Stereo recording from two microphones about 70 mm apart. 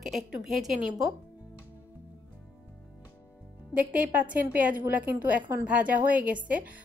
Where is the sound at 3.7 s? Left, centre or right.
Right.